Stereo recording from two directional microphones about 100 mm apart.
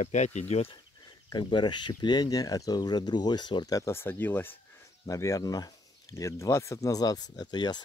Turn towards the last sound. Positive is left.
turn(degrees=45)  # may be behind; listen again after turning